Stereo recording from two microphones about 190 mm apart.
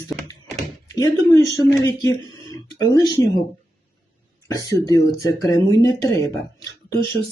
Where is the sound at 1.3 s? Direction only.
15° left (ahead or behind).